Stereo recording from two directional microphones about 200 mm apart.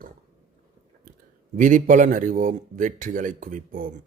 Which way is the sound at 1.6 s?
40° right (ahead or behind).